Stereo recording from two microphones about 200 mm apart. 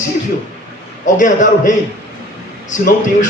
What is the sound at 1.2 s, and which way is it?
Speech, 40° left (ahead or behind).